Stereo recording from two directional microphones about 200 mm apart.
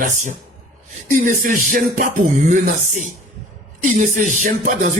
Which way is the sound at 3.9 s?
40° right (ahead or behind).